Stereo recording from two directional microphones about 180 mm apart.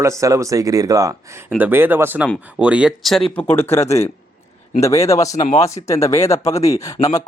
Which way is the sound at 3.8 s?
35° left (ahead or behind).